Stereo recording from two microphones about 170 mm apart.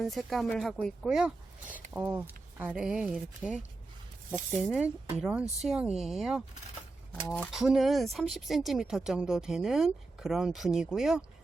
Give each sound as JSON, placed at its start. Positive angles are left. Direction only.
{"t": 0.0, "sound": "speech", "side_deg": 0}
{"t": 4.6, "sound": "speech", "side_deg": -5}